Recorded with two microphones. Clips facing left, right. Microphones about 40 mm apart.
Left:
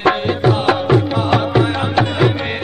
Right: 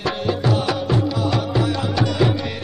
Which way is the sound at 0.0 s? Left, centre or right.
Left.